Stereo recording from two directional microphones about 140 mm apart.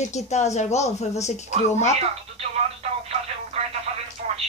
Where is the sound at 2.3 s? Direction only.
50° right (ahead or behind).